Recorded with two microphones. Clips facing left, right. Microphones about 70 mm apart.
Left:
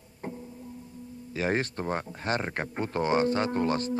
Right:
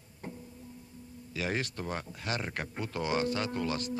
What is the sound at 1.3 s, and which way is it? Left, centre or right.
Speech, left.